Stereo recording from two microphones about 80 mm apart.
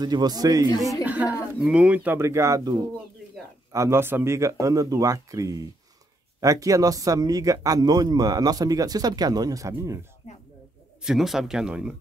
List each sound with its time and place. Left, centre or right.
0.0 s speech: right
1.0 s a sound: centre
1.6 s speech: centre
2.1 s speech: right
3.7 s speech: right
11.0 s speech: centre